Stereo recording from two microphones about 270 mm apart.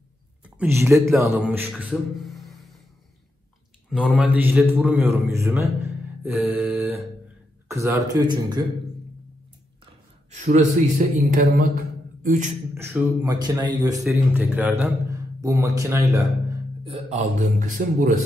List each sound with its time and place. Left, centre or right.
0.6 s a man's voice: centre
3.9 s a man's voice: centre
10.3 s a man's voice: right
11.2 s mantra: right
12.7 s a man's voice: centre
16.8 s a man's voice: right